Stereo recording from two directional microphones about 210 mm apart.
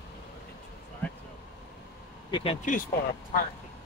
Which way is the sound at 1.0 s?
5° left (ahead or behind).